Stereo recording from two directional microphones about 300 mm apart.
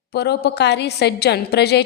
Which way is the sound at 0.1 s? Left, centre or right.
Left.